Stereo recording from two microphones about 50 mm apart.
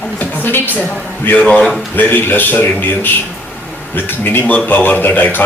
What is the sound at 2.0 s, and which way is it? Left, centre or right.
A man's voice, left.